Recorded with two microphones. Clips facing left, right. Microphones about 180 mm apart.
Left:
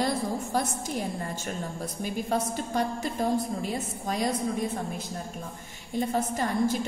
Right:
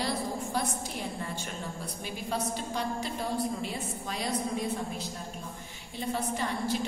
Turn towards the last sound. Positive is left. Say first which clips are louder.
# left 5 dB
turn(degrees=45)  # may be behind; listen again after turning